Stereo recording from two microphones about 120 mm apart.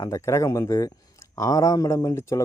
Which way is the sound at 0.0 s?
25° left (ahead or behind).